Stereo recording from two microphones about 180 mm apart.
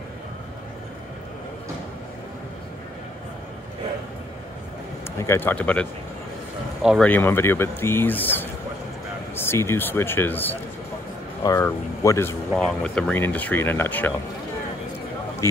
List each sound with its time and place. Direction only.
5.2 s speech: 15° left (ahead or behind)
6.8 s speech: 5° right (ahead or behind)
7.1 s speech: 10° left (ahead or behind)
12.5 s speech: 5° left (ahead or behind)
15.4 s speech: 15° left (ahead or behind)